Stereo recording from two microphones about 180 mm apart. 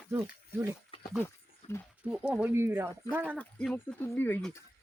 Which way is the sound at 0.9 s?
30° left (ahead or behind).